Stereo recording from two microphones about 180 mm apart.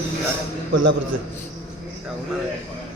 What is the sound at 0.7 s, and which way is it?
Speech, 90° right.